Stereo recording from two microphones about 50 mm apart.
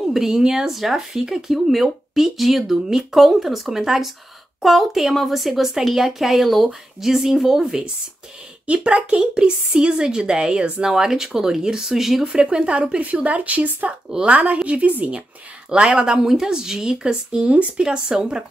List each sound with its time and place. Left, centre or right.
0.1 s speech: centre
8.6 s speech: right
12.4 s a woman's voice: right
17.8 s speech: centre